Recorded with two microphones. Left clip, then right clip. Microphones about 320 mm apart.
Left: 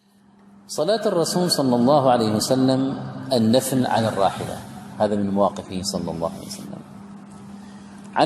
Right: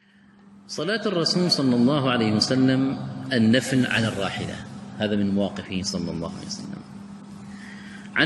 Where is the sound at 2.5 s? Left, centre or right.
Left.